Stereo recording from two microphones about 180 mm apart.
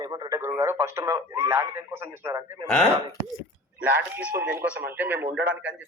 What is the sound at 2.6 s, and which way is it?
Speech, 5° left (ahead or behind).